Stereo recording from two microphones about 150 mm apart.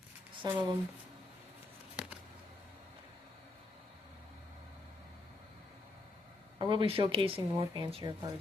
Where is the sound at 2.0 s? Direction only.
5° right (ahead or behind).